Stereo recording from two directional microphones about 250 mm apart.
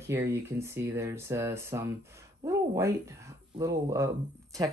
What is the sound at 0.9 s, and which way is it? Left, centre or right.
Speech, centre.